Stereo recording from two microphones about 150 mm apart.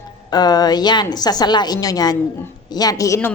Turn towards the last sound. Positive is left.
turn(degrees=15)  # may be behind; listen again after turning